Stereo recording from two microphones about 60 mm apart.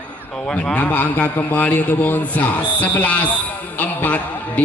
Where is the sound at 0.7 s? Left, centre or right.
Left.